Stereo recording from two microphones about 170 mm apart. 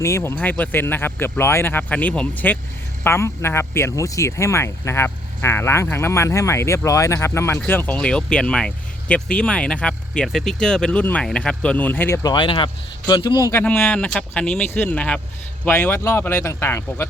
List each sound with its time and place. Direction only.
0.0 s speech: 15° left (ahead or behind)